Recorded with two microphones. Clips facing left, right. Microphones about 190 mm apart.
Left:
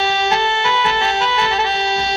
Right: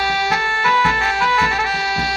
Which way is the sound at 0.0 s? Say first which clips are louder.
Left 3 dB; 25° left (ahead or behind).